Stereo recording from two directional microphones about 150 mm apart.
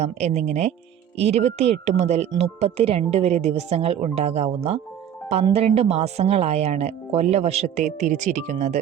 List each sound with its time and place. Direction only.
0.0 s speech: 45° right (ahead or behind)